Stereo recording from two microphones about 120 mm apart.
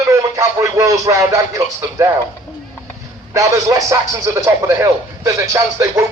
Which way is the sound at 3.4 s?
25° right (ahead or behind).